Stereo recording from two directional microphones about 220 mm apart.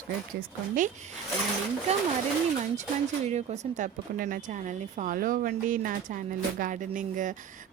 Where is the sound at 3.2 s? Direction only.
30° right (ahead or behind).